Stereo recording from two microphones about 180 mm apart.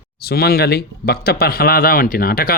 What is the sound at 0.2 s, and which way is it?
Speech, 60° left (ahead or behind).